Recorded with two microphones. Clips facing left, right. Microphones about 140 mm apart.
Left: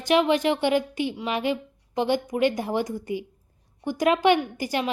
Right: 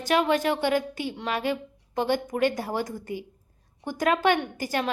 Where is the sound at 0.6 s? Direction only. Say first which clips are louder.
Left 2 dB; 45° right (ahead or behind).